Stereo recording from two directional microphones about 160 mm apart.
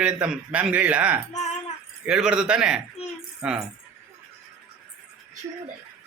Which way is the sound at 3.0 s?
40° left (ahead or behind).